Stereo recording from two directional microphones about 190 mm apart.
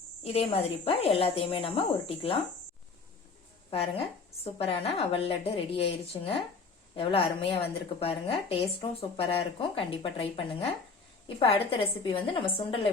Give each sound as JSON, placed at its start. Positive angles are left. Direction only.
{"t": 0.2, "sound": "speech", "side_deg": 30}
{"t": 3.7, "sound": "a woman's voice", "side_deg": 30}